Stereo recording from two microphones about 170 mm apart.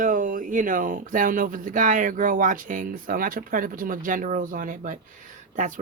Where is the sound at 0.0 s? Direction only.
50° right (ahead or behind).